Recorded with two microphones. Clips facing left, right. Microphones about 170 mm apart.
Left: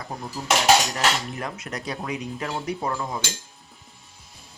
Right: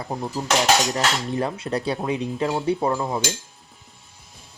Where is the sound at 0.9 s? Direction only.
30° right (ahead or behind).